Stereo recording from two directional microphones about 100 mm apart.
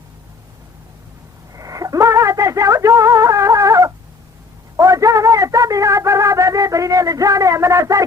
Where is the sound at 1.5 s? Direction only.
35° right (ahead or behind).